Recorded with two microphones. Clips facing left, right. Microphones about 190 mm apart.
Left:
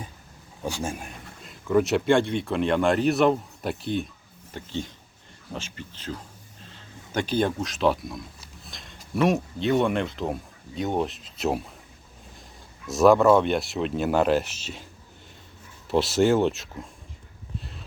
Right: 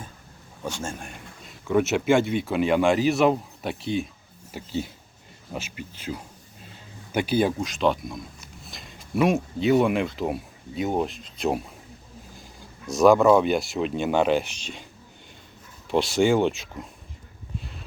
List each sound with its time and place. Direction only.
0.6 s a man's voice: 15° left (ahead or behind)
1.0 s speech: centre (ahead or behind)
12.9 s speech: centre (ahead or behind)
15.9 s speech: centre (ahead or behind)